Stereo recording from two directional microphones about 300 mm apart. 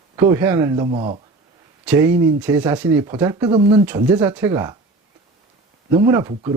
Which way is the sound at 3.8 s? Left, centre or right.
Centre.